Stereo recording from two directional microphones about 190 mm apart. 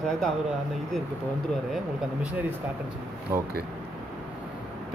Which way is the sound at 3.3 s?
10° right (ahead or behind).